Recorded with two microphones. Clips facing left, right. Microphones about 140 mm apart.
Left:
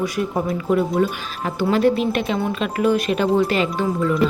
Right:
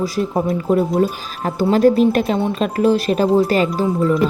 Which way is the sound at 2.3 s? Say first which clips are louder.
Right 4 dB; 25° right (ahead or behind).